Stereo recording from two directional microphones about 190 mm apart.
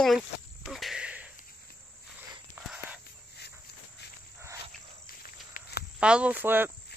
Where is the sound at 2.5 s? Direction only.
5° right (ahead or behind).